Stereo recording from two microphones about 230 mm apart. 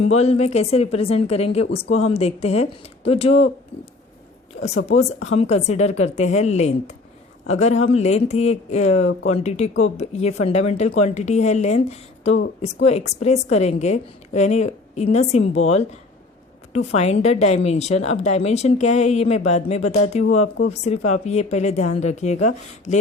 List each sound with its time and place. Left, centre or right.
0.0 s a woman's voice: left
4.9 s a woman's voice: left